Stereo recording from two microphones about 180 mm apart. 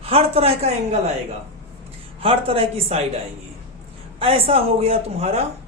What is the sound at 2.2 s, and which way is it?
Speech, 30° right (ahead or behind).